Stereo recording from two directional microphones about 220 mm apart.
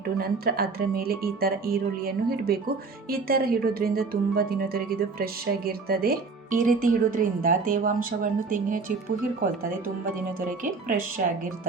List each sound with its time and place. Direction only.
0.2 s a woman's voice: 45° right (ahead or behind)
10.6 s speech: 35° right (ahead or behind)